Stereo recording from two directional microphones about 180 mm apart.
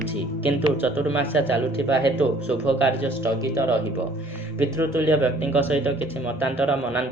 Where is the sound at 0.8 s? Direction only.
10° right (ahead or behind).